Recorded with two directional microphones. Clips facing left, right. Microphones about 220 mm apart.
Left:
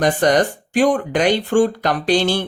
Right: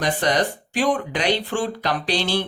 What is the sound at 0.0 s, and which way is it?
Speech, 50° left (ahead or behind).